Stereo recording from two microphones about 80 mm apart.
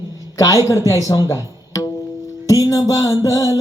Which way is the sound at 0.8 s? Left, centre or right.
Left.